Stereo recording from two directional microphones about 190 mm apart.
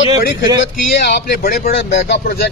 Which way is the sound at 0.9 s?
60° left (ahead or behind).